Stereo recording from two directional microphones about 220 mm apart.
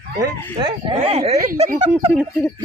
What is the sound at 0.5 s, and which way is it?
Speech, 20° right (ahead or behind).